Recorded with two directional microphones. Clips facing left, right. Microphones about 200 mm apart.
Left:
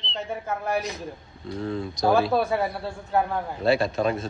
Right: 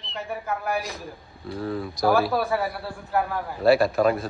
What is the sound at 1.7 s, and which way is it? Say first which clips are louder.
Speech: even; 25° left (ahead or behind).